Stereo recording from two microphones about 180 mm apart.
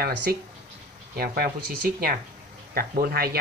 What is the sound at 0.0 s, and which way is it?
Speech, 60° right (ahead or behind).